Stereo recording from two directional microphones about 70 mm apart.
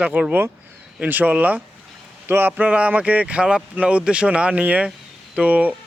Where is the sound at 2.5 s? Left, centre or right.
Centre.